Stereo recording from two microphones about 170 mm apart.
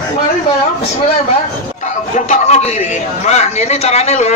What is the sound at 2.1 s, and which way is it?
A man's voice, 45° left (ahead or behind).